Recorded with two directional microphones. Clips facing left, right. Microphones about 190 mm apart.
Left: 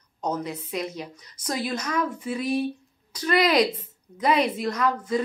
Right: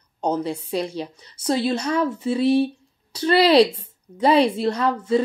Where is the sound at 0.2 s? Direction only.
30° right (ahead or behind).